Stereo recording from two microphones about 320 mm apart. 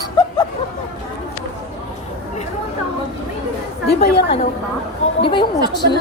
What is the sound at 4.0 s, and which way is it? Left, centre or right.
Speech, left.